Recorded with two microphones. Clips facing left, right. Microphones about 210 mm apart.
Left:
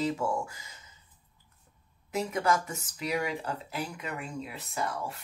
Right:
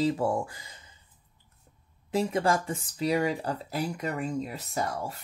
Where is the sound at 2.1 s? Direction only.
30° right (ahead or behind).